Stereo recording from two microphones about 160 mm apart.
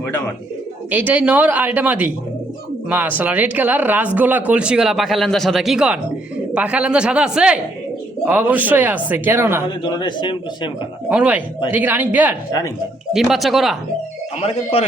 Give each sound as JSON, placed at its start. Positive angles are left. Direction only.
{"t": 0.9, "sound": "speech", "side_deg": -10}
{"t": 9.6, "sound": "a man's voice", "side_deg": 30}
{"t": 11.1, "sound": "speech", "side_deg": -10}
{"t": 12.5, "sound": "a man's voice", "side_deg": 20}
{"t": 13.1, "sound": "speech", "side_deg": 0}
{"t": 14.4, "sound": "a man's voice", "side_deg": 40}